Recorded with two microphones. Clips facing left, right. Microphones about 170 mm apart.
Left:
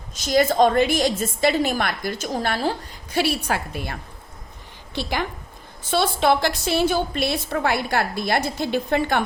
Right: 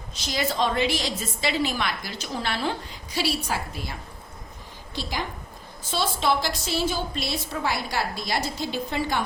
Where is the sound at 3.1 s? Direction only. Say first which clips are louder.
Left 5 dB; 60° left (ahead or behind).